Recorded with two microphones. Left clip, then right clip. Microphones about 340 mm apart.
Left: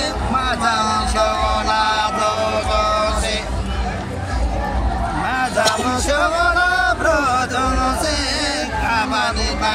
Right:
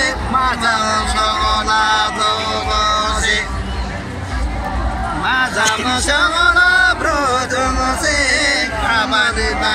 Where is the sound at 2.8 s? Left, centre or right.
Centre.